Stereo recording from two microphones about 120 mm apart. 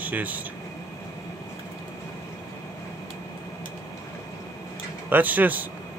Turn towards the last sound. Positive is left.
turn(degrees=-15)  # may be behind; listen again after turning